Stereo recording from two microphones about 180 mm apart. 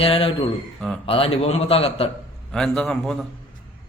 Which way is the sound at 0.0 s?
30° left (ahead or behind).